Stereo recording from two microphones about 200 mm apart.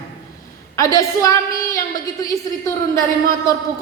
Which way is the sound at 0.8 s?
15° left (ahead or behind).